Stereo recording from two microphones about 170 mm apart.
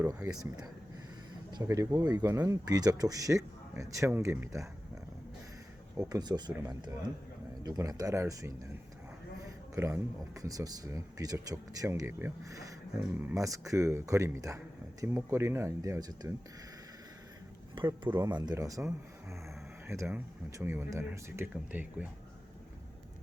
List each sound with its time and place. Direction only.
0.0 s speech: 20° right (ahead or behind)
1.5 s speech: 20° right (ahead or behind)
6.0 s speech: 20° right (ahead or behind)
17.7 s speech: 30° right (ahead or behind)
19.9 s speech: 15° right (ahead or behind)